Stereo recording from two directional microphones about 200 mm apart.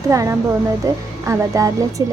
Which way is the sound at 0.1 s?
15° right (ahead or behind).